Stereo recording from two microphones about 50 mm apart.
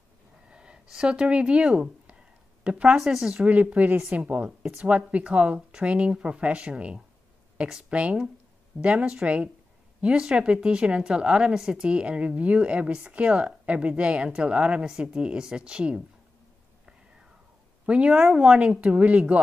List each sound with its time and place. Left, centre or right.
0.5 s speech: centre
2.0 s a sound: right
3.0 s speech: centre
3.7 s speech: right
4.1 s a woman's voice: right; by 11.9 s centre
11.9 s speech: right
17.8 s speech: right